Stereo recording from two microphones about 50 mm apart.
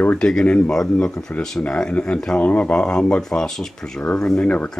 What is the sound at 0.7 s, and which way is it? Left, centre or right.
Speech, centre.